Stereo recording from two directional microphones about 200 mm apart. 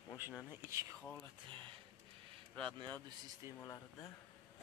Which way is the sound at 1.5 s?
25° right (ahead or behind).